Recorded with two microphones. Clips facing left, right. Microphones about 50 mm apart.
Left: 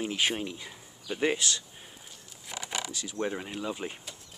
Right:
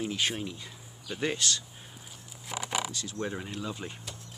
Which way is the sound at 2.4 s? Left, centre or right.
Centre.